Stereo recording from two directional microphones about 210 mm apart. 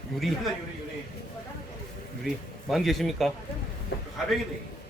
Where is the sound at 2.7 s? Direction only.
Centre (ahead or behind).